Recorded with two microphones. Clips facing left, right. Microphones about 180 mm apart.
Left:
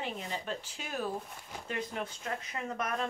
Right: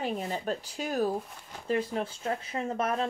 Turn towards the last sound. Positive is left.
turn(degrees=-30)  # may be behind; listen again after turning